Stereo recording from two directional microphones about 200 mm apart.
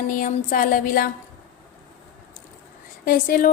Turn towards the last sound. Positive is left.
turn(degrees=45)  # may be behind; listen again after turning